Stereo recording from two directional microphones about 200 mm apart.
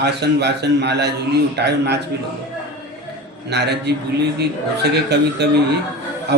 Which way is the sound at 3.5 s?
55° right (ahead or behind).